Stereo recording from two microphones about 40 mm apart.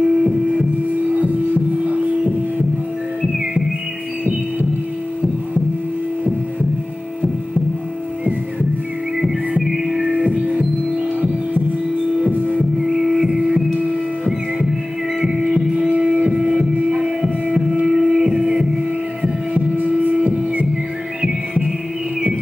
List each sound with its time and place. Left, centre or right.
0.0 s music: centre
9.6 s music: centre
10.1 s music: right
12.5 s music: centre
13.5 s music: right
14.2 s music: centre
19.2 s heart sounds: right